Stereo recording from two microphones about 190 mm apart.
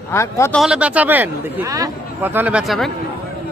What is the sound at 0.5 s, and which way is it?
Speech, 5° right (ahead or behind).